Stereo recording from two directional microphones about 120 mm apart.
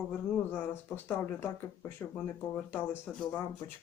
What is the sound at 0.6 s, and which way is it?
Speech, 20° left (ahead or behind).